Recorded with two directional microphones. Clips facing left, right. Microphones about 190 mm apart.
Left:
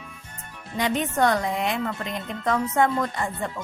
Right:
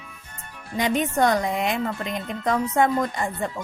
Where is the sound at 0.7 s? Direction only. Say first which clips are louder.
Right 2 dB; 15° right (ahead or behind).